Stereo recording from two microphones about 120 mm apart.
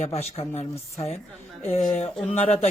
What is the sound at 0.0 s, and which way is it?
Speech, 60° left (ahead or behind).